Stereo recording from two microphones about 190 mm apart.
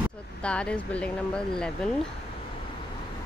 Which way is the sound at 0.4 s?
5° left (ahead or behind).